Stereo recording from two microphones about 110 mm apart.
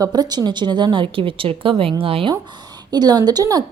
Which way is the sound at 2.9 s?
40° right (ahead or behind).